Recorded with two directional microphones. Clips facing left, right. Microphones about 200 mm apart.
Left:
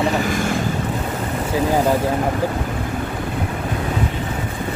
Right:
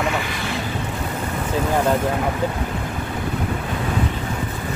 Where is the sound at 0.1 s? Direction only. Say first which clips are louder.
Left 6 dB; 45° left (ahead or behind).